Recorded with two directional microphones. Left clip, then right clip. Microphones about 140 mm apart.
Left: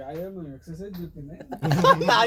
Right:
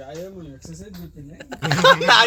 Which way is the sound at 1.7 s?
15° right (ahead or behind).